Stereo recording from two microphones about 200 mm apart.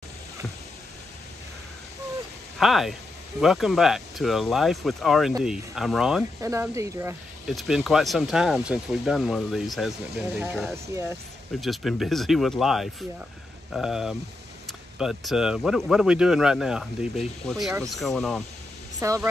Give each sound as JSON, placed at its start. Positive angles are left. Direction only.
{"t": 2.6, "sound": "speech", "side_deg": 0}
{"t": 6.4, "sound": "speech", "side_deg": -15}
{"t": 7.4, "sound": "speech", "side_deg": 0}
{"t": 18.9, "sound": "speech", "side_deg": -15}